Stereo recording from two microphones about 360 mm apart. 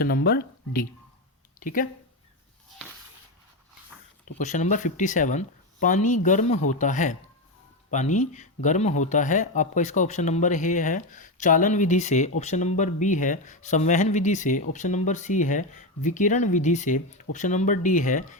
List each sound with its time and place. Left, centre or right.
0.0 s speech: left
4.4 s speech: centre